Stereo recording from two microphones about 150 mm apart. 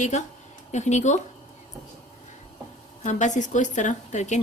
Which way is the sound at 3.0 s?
55° left (ahead or behind).